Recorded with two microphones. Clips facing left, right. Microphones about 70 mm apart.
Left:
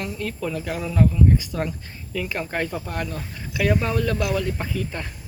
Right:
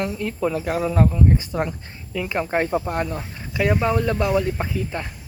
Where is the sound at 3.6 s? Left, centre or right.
Centre.